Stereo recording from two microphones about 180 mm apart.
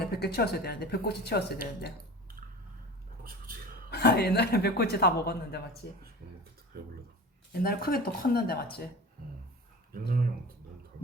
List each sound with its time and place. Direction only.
0.0 s speech: 60° left (ahead or behind)
3.2 s a sound: 55° right (ahead or behind)
3.8 s speech: 65° left (ahead or behind)
7.6 s speech: 55° left (ahead or behind)